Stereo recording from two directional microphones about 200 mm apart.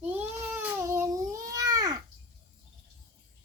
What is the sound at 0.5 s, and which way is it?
Babbling, 10° right (ahead or behind).